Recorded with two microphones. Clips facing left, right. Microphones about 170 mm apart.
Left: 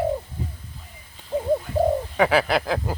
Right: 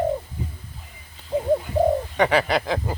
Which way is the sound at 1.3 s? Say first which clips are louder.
Right 1 dB; 15° right (ahead or behind).